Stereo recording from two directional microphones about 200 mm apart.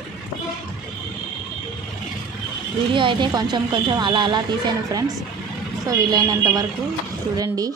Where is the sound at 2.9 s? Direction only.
25° right (ahead or behind).